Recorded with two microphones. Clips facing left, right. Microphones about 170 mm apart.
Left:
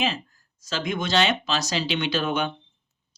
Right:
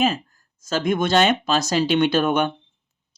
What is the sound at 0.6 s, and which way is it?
Speech, 50° right (ahead or behind).